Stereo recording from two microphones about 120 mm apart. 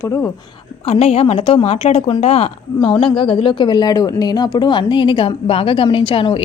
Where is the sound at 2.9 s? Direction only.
40° left (ahead or behind).